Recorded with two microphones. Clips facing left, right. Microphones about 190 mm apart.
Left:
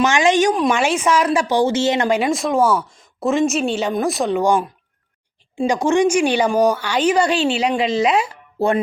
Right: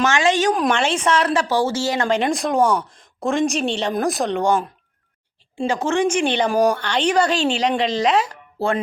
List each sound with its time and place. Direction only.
0.0 s speech: 15° left (ahead or behind)
0.5 s speech: 5° left (ahead or behind); by 2.0 s 20° left (ahead or behind)
2.0 s a woman's voice: 5° left (ahead or behind)